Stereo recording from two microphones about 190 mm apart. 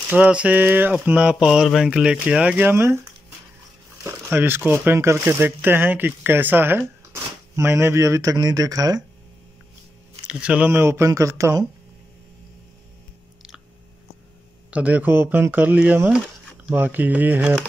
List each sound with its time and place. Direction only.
0.1 s speech: 5° right (ahead or behind)
4.0 s crumpling: 10° right (ahead or behind)
4.6 s speech: 10° right (ahead or behind)
10.2 s speech: 5° right (ahead or behind)
14.7 s speech: 5° right (ahead or behind)